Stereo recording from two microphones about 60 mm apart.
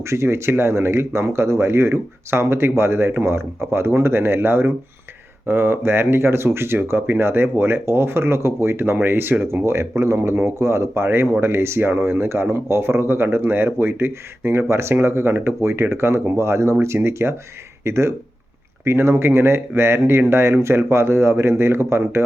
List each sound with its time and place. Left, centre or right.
0.0 s speech: right